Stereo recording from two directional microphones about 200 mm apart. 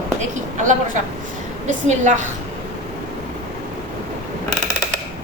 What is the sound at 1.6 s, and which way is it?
Speech, 35° right (ahead or behind).